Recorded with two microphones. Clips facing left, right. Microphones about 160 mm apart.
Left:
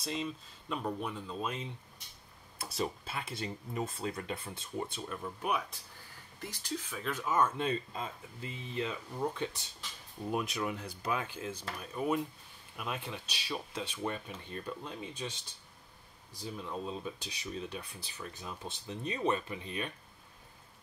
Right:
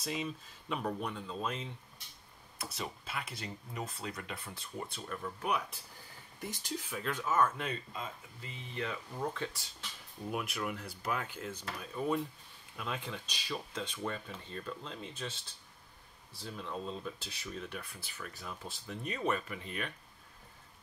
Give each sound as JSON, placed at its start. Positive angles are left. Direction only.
{"t": 0.0, "sound": "speech", "side_deg": -5}
{"t": 2.6, "sound": "speech", "side_deg": 30}
{"t": 6.4, "sound": "speech", "side_deg": -20}
{"t": 6.9, "sound": "speech", "side_deg": 5}
{"t": 7.3, "sound": "speech", "side_deg": 25}
{"t": 8.7, "sound": "speech", "side_deg": 20}
{"t": 16.3, "sound": "speech", "side_deg": 10}